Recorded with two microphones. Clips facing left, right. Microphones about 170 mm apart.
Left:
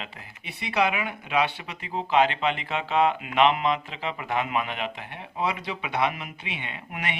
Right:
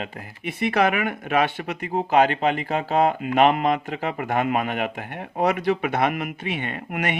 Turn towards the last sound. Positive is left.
turn(degrees=-50)  # may be behind; listen again after turning